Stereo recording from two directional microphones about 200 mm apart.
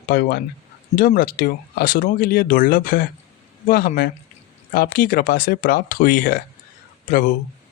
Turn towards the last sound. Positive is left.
turn(degrees=40)  # may be behind; listen again after turning